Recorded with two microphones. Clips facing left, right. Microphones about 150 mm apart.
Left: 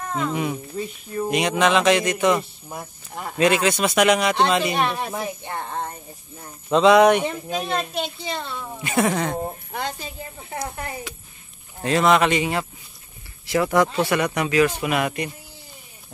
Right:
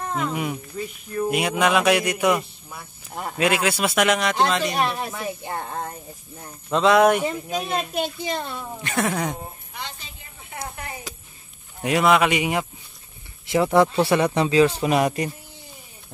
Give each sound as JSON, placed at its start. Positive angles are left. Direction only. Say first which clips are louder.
{"t": 0.1, "sound": "speech", "louder": "left 3 dB", "side_deg": -5}
{"t": 8.8, "sound": "speech", "louder": "left 4 dB", "side_deg": 5}
{"t": 9.1, "sound": "speech", "louder": "left 2 dB", "side_deg": -10}
{"t": 9.7, "sound": "a sound", "louder": "left 8 dB", "side_deg": 45}
{"t": 11.8, "sound": "speech", "louder": "even", "side_deg": -10}